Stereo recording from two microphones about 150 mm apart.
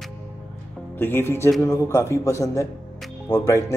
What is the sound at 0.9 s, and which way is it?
A man's voice, 15° left (ahead or behind).